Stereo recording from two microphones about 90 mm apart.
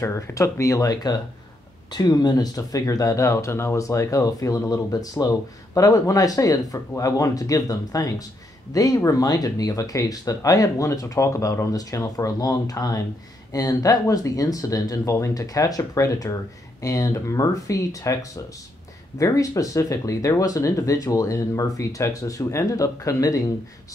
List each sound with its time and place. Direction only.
0.0 s speech: 35° left (ahead or behind)